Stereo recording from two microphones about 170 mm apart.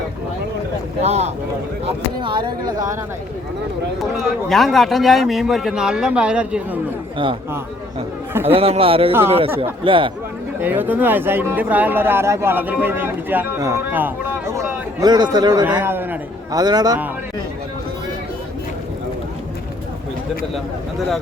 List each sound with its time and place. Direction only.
1.0 s speech: 40° right (ahead or behind)
1.8 s speech: 30° right (ahead or behind)
4.4 s a man's voice: centre (ahead or behind)
8.3 s a man's voice: 15° right (ahead or behind)
8.5 s speech: 35° right (ahead or behind)
10.6 s speech: 10° right (ahead or behind)
15.6 s speech: 10° right (ahead or behind)